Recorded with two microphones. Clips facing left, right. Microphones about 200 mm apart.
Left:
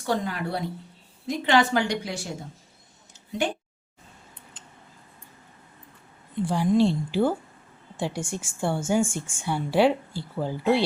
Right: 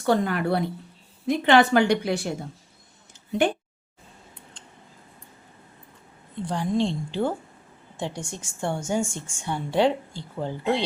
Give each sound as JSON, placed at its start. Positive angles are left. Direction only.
{"t": 0.0, "sound": "a woman's voice", "side_deg": -60}
{"t": 3.1, "sound": "a sound", "side_deg": -60}
{"t": 6.4, "sound": "a woman's voice", "side_deg": 10}